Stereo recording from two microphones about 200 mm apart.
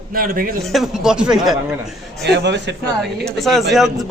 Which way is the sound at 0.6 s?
Centre (ahead or behind).